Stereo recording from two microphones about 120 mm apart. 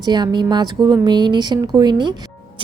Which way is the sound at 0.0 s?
35° right (ahead or behind).